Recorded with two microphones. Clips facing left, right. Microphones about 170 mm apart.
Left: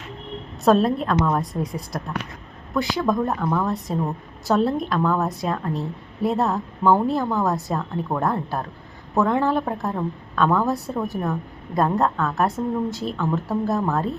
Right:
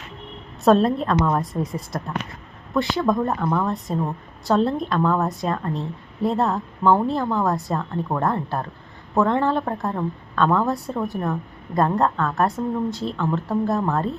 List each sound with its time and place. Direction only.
0.6 s a woman's voice: centre (ahead or behind)